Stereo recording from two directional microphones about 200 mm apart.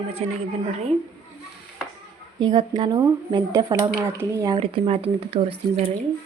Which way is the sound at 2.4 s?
20° right (ahead or behind).